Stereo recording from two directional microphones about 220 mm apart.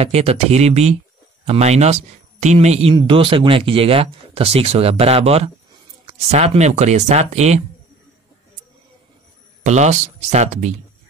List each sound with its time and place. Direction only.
0.0 s speech: 25° right (ahead or behind)
9.6 s speech: 30° right (ahead or behind)